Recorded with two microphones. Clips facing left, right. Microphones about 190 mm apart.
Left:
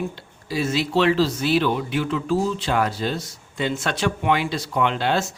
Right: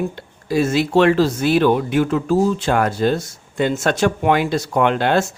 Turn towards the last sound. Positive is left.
turn(degrees=-55)  # may be behind; listen again after turning